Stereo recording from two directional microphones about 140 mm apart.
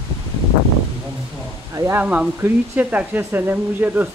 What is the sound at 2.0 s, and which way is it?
Speech, 10° right (ahead or behind).